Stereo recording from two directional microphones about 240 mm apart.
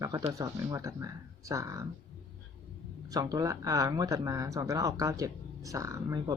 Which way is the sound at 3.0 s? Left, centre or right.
Centre.